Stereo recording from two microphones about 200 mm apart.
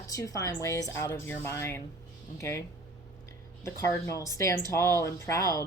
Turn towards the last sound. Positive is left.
turn(degrees=15)  # may be behind; listen again after turning